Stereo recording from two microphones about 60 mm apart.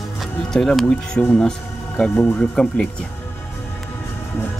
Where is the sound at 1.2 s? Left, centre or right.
Left.